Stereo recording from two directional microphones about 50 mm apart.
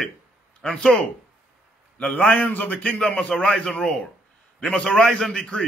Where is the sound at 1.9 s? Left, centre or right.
Left.